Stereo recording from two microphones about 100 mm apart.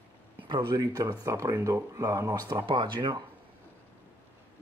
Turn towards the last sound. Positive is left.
turn(degrees=-50)  # may be behind; listen again after turning